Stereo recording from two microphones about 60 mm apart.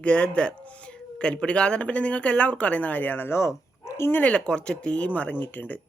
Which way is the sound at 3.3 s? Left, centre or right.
Left.